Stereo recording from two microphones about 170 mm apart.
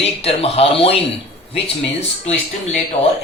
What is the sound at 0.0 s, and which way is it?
Speech, 35° left (ahead or behind).